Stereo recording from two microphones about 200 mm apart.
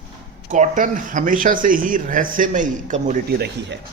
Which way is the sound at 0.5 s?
40° right (ahead or behind).